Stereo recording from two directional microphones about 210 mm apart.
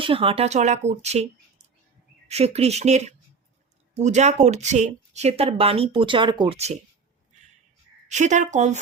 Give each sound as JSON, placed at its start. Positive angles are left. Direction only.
{"t": 0.0, "sound": "speech", "side_deg": -25}
{"t": 8.0, "sound": "speech", "side_deg": -35}